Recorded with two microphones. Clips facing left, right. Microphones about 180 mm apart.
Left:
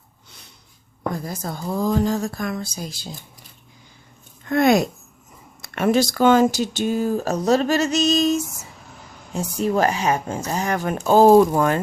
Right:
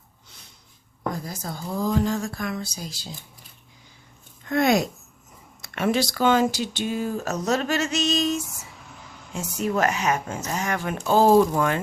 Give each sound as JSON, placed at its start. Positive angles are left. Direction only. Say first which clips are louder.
{"t": 1.2, "sound": "speech", "louder": "left 4 dB", "side_deg": 55}
{"t": 4.4, "sound": "speech", "louder": "left 4 dB", "side_deg": 55}